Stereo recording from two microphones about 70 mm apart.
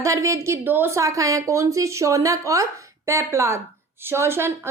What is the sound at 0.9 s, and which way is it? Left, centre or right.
A woman's voice, right.